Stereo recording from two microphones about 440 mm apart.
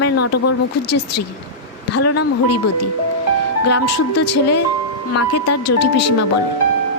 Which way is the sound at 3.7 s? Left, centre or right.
Left.